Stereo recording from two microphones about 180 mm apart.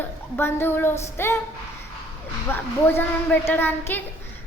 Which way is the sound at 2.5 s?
10° left (ahead or behind).